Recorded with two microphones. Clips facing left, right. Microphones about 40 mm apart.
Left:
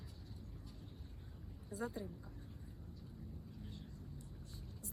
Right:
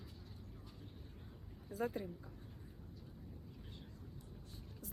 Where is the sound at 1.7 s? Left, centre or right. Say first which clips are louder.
Right 3 dB; right.